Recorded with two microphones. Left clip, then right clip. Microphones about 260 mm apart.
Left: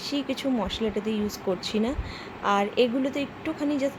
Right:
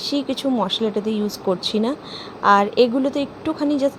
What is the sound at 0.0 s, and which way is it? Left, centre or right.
A woman's voice, centre.